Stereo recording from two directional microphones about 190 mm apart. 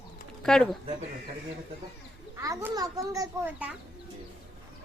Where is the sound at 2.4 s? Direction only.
15° right (ahead or behind).